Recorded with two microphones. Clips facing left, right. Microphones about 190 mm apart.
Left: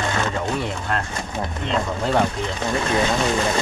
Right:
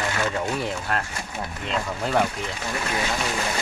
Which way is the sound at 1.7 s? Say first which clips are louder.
Left 3 dB; 35° left (ahead or behind).